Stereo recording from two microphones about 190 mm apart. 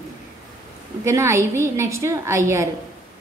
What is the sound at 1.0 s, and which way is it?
A woman's voice, 15° right (ahead or behind).